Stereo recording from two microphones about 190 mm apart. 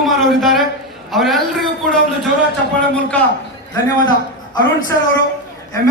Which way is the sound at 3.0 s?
5° left (ahead or behind).